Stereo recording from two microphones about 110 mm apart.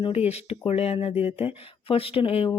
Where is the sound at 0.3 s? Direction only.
65° left (ahead or behind).